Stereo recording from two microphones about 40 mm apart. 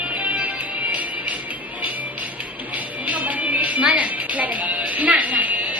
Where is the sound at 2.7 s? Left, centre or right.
Right.